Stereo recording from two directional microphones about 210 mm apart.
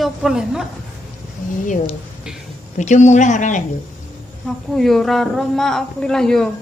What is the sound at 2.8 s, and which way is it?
Speech, 35° left (ahead or behind).